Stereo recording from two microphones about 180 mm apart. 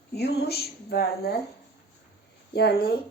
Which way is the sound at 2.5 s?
60° left (ahead or behind).